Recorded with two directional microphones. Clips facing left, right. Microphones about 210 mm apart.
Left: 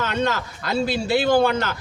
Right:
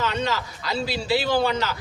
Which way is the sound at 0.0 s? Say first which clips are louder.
Left 2 dB; 50° left (ahead or behind).